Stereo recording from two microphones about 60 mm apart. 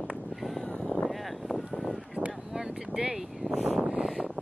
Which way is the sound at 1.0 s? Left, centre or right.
Centre.